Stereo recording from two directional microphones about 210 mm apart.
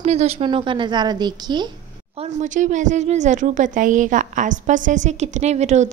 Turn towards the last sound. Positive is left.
turn(degrees=-35)  # may be behind; listen again after turning